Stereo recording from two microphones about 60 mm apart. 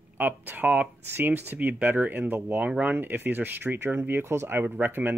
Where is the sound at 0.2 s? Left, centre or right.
Right.